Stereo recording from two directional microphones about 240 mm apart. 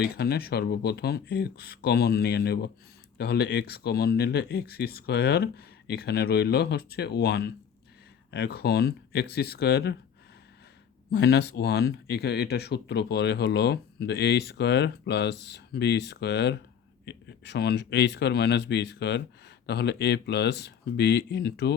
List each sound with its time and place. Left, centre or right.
0.0 s speech: left
11.1 s speech: left